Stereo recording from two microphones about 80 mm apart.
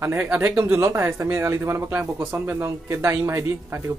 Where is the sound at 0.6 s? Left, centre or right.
Right.